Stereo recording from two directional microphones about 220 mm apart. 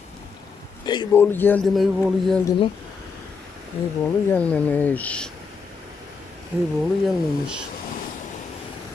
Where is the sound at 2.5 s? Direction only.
25° left (ahead or behind).